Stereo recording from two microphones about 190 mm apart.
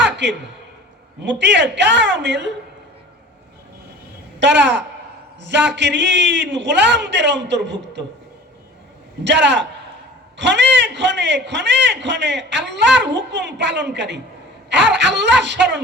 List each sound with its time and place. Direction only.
0.0 s a sound: 70° right (ahead or behind)
1.2 s a man's voice: 70° right (ahead or behind)
4.4 s a woman's voice: 70° right (ahead or behind)
9.2 s a man's voice: 70° right (ahead or behind)